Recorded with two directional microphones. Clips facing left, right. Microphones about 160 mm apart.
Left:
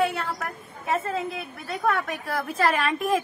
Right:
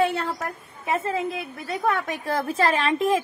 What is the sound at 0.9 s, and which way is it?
Speech, 20° right (ahead or behind).